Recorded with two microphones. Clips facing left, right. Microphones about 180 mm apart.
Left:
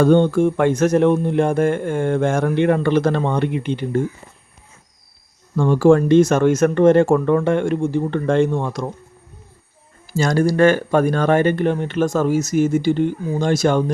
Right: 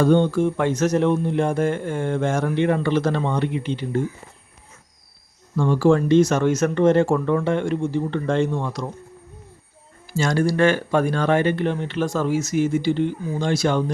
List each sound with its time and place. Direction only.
0.0 s speech: 55° left (ahead or behind)
5.5 s speech: 50° left (ahead or behind)
10.1 s speech: 40° left (ahead or behind)